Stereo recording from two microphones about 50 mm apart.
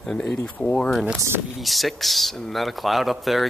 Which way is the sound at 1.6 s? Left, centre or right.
Centre.